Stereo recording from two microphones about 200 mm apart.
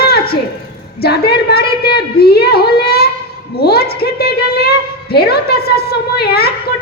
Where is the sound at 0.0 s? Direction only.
50° left (ahead or behind).